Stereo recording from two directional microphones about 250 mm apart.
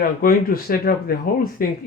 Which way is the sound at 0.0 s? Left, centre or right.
Left.